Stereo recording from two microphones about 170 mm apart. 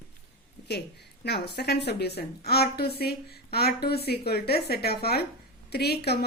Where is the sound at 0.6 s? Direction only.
75° left (ahead or behind).